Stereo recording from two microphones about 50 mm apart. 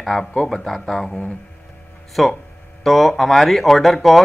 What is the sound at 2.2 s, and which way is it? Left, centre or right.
Speech, centre.